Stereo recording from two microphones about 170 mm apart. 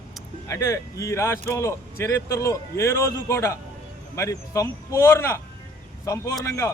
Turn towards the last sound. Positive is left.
turn(degrees=15)  # may be behind; listen again after turning